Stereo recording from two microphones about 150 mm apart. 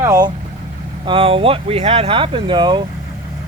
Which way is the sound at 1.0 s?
35° right (ahead or behind).